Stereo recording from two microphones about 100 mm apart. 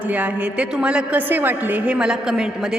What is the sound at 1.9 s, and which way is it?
Speech, 5° right (ahead or behind).